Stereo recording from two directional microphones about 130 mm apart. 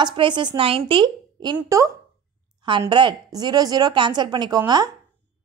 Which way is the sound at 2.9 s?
35° right (ahead or behind).